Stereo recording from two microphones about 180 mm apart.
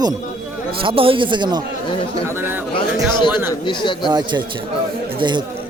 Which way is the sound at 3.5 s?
25° left (ahead or behind).